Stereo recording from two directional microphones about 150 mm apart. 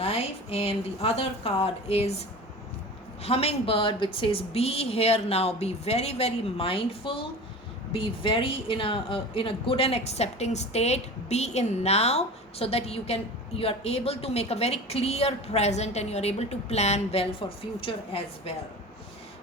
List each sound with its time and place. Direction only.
0.0 s speech: 40° left (ahead or behind)
3.2 s a woman's voice: 40° left (ahead or behind)